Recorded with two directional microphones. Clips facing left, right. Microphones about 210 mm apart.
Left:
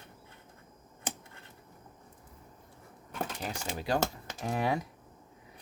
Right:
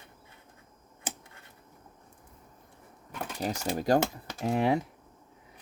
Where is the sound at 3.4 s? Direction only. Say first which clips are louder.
Right 7 dB; 40° right (ahead or behind).